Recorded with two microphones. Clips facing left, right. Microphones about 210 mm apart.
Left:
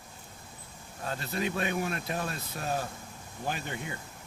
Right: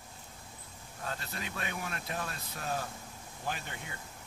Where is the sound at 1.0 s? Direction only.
25° left (ahead or behind).